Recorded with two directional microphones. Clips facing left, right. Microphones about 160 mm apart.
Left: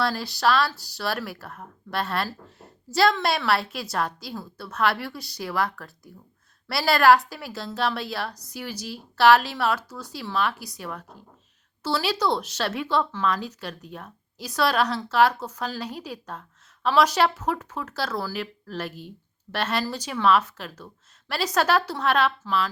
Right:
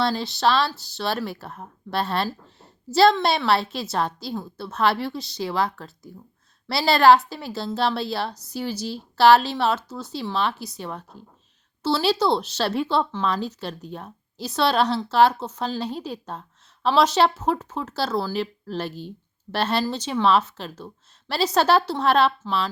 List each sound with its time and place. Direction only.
0.0 s speech: 25° right (ahead or behind)